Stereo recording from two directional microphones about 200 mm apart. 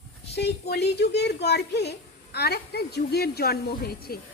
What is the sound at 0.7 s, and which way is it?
A woman's voice, 55° left (ahead or behind).